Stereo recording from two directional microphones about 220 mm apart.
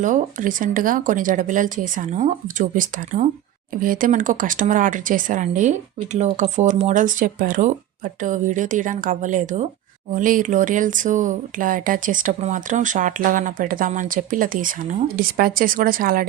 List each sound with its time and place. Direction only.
0.0 s speech: 35° right (ahead or behind)